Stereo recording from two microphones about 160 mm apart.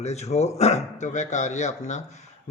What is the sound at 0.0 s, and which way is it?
Speech, 45° left (ahead or behind).